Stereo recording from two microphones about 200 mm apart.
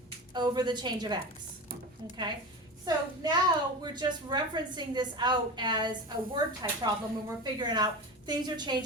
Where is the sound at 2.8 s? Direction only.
20° right (ahead or behind).